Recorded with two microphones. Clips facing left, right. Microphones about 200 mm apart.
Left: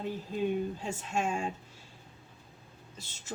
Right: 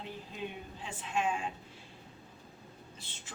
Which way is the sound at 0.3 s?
45° left (ahead or behind).